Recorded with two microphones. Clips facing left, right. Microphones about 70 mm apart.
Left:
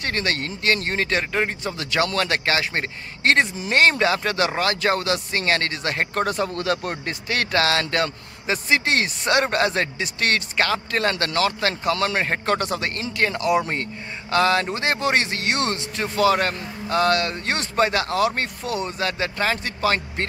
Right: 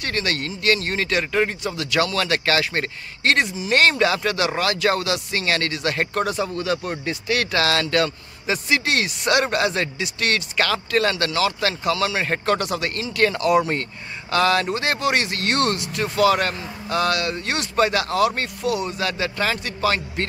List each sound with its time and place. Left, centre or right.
0.0 s speech: left
7.2 s speech: left